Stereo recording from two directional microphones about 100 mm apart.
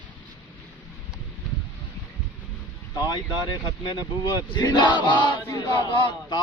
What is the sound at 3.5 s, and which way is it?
Speech, 45° left (ahead or behind).